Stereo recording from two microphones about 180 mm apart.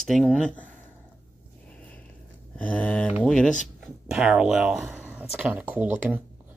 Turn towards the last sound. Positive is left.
turn(degrees=-10)  # may be behind; listen again after turning